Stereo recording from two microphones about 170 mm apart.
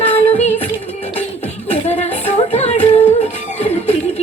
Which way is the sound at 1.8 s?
40° left (ahead or behind).